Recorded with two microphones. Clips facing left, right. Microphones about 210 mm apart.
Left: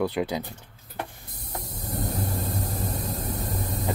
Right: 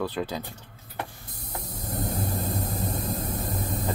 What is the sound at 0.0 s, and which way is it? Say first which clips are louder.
Speech: left 3 dB; 15° left (ahead or behind).